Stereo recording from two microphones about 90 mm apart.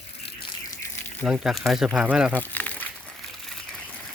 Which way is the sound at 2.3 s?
15° left (ahead or behind).